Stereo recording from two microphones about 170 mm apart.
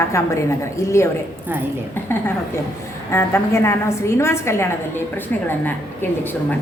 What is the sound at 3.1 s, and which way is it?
A woman's voice, 15° left (ahead or behind).